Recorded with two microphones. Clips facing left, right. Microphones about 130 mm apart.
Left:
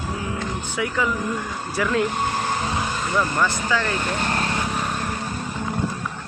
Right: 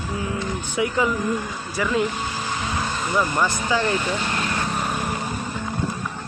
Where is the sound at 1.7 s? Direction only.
Centre (ahead or behind).